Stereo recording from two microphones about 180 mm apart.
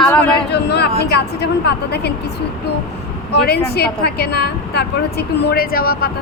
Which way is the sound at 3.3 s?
60° left (ahead or behind).